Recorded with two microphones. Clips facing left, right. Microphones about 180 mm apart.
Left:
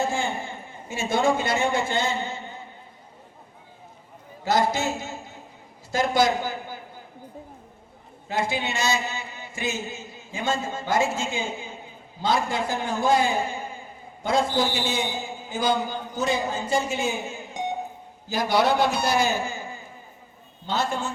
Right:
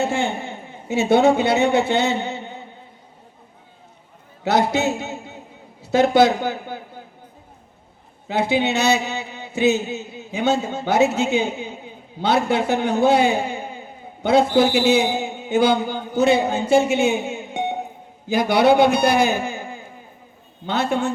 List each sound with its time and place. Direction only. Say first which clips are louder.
0.0 s a man's voice: right 4 dB; 65° right (ahead or behind)
4.4 s a man's voice: right 4 dB; 65° right (ahead or behind)
8.3 s a man's voice: right 7 dB; 65° right (ahead or behind)